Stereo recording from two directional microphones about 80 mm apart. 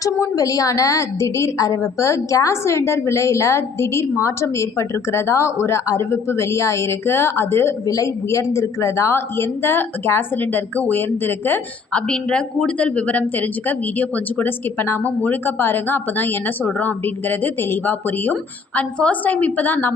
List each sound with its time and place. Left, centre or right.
0.0 s a woman's voice: left
11.9 s a woman's voice: centre